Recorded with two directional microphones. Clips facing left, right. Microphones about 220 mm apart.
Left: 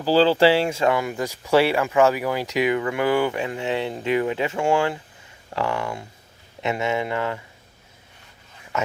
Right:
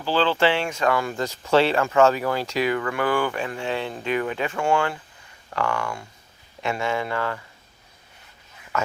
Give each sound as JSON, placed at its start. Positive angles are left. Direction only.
{"t": 0.0, "sound": "speech", "side_deg": 35}
{"t": 8.7, "sound": "speech", "side_deg": 20}